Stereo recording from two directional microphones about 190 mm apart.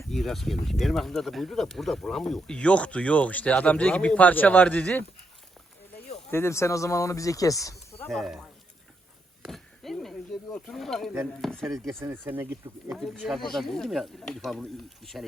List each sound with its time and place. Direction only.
0.1 s speech: centre (ahead or behind)
6.3 s speech: 15° left (ahead or behind)
8.0 s speech: centre (ahead or behind)
9.4 s a sound: centre (ahead or behind)
11.3 s speech: centre (ahead or behind)
11.7 s speech: 15° right (ahead or behind)
13.0 s speech: centre (ahead or behind)